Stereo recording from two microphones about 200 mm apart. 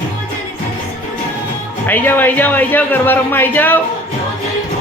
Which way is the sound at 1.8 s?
10° left (ahead or behind).